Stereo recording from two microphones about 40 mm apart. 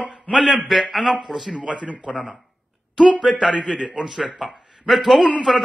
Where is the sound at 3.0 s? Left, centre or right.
Right.